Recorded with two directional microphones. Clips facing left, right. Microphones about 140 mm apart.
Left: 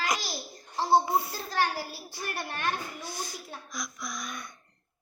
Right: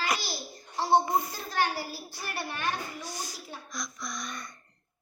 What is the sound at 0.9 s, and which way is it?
A child's voice, 5° left (ahead or behind).